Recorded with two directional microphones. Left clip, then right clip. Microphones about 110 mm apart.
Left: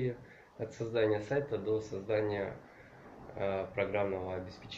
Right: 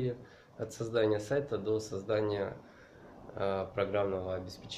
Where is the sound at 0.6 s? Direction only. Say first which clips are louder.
Right 1 dB; 30° right (ahead or behind).